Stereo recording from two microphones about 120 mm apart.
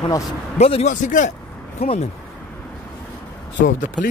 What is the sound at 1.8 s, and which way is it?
Speech, 55° left (ahead or behind).